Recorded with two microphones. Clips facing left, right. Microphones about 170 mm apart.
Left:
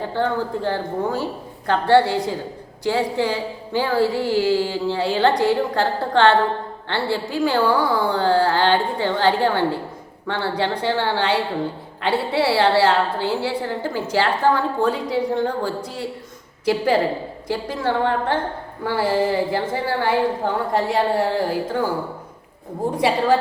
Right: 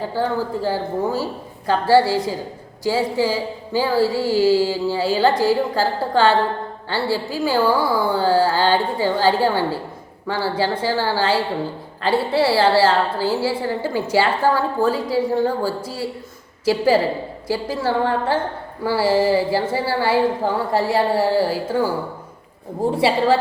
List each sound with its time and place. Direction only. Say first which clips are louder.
0.1 s a woman's voice: left 1 dB; 5° right (ahead or behind)